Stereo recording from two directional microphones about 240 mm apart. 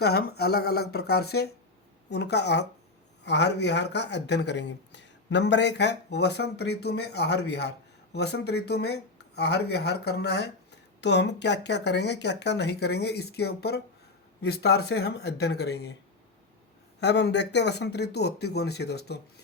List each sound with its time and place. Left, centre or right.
0.0 s speech: left
17.0 s speech: left